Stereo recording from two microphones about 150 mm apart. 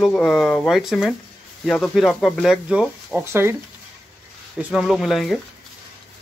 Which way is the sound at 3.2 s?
15° right (ahead or behind).